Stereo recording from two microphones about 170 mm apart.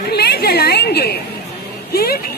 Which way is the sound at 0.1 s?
70° left (ahead or behind).